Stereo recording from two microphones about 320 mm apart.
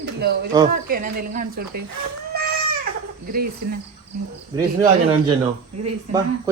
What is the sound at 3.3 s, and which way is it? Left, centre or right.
Speech, right.